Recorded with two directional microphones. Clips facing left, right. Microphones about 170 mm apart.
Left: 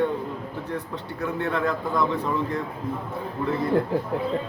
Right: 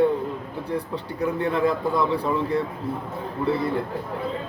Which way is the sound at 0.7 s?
30° right (ahead or behind).